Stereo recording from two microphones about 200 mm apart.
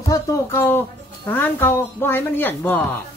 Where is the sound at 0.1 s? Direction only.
10° left (ahead or behind).